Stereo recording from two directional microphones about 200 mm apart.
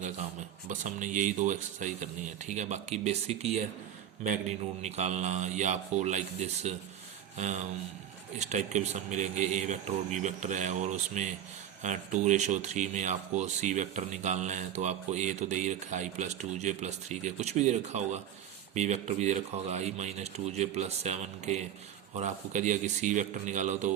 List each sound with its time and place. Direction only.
0.7 s speech: 40° right (ahead or behind)